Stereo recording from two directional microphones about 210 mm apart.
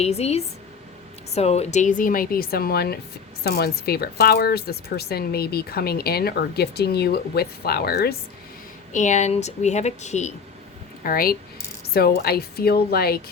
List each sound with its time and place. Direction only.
0.0 s speech: 30° left (ahead or behind); by 8.1 s 45° left (ahead or behind)
8.9 s speech: 35° left (ahead or behind)
11.0 s speech: 45° left (ahead or behind)